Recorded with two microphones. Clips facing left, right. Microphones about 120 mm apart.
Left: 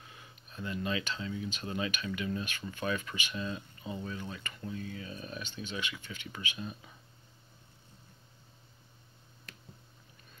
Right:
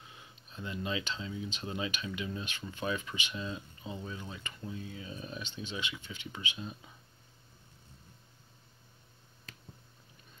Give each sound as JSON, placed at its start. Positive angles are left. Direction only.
{"t": 0.0, "sound": "speech", "side_deg": -20}